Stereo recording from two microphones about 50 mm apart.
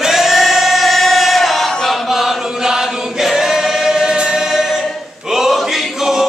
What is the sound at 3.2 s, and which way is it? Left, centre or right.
Choir, centre.